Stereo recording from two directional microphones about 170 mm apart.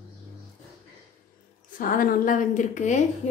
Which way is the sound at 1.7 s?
55° left (ahead or behind).